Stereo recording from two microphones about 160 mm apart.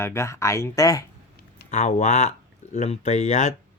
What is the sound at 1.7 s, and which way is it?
Speech, 45° left (ahead or behind).